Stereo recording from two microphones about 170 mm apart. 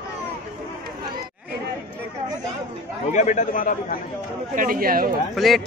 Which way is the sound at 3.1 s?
45° left (ahead or behind).